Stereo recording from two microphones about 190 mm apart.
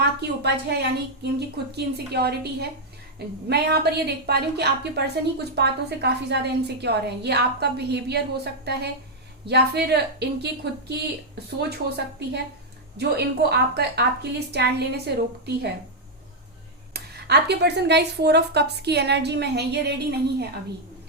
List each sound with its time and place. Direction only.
0.2 s a woman's voice: 60° right (ahead or behind)
11.7 s a woman's voice: 55° right (ahead or behind)
16.9 s a woman's voice: 60° right (ahead or behind)